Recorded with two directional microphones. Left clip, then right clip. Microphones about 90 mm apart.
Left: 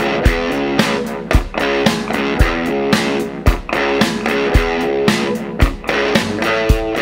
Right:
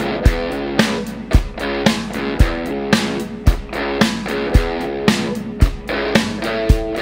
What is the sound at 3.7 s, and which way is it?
Music, 25° left (ahead or behind).